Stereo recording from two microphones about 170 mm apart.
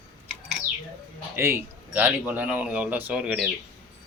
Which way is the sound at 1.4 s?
15° right (ahead or behind).